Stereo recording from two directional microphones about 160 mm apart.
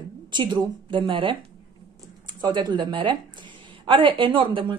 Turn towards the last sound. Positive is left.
turn(degrees=-30)  # may be behind; listen again after turning